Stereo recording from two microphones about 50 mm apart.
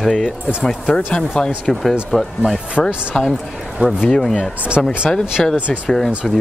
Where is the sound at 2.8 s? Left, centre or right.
Centre.